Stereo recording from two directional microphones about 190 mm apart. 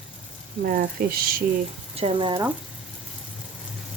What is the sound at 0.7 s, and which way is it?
Speech, 50° right (ahead or behind).